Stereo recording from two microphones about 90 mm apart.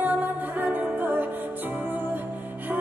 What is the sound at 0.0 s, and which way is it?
Music, 20° right (ahead or behind).